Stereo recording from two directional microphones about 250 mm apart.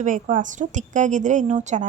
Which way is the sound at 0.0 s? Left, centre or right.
Right.